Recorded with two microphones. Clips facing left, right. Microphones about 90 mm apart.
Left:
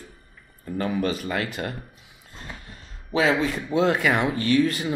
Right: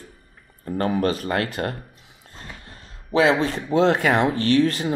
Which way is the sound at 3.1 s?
45° right (ahead or behind).